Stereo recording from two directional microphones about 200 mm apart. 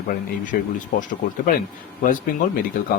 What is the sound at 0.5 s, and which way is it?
Speech, 45° left (ahead or behind).